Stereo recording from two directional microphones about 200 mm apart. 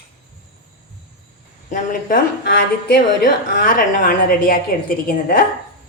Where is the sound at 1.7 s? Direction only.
45° left (ahead or behind).